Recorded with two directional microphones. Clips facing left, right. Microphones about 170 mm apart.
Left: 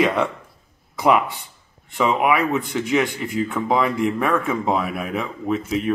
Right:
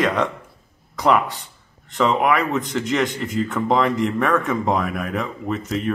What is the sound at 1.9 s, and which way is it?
Speech, 5° left (ahead or behind).